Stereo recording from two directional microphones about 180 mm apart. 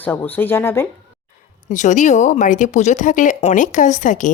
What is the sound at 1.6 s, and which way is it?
Speech, 40° left (ahead or behind).